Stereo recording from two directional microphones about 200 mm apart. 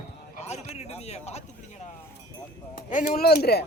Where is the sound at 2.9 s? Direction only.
45° left (ahead or behind).